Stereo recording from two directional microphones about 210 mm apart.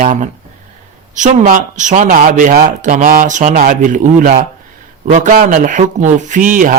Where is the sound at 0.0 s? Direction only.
35° right (ahead or behind).